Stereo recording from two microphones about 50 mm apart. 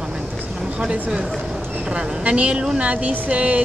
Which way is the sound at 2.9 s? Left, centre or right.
Right.